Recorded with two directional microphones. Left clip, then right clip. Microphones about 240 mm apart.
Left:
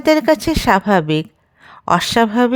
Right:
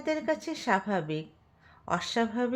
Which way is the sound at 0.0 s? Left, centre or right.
Left.